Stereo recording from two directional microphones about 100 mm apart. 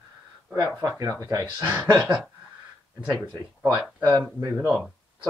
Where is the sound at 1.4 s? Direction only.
20° right (ahead or behind).